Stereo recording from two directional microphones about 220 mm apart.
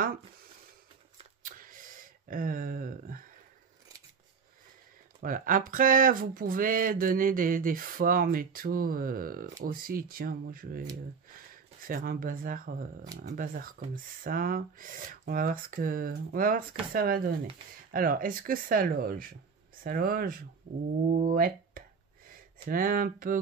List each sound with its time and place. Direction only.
1.1 s a sound: 40° right (ahead or behind)
5.2 s speech: 40° right (ahead or behind)
11.9 s speech: 40° right (ahead or behind)